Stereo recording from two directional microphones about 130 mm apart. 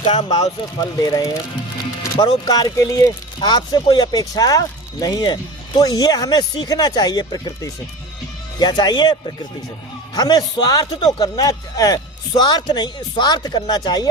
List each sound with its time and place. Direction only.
0.0 s speech: 45° left (ahead or behind)
0.8 s speech: 30° left (ahead or behind)